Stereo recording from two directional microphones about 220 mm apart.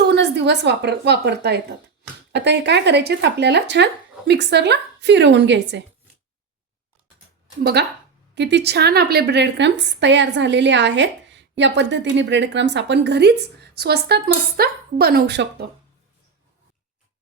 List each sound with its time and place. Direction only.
0.1 s a woman's voice: 50° right (ahead or behind)
7.6 s a woman's voice: 45° right (ahead or behind)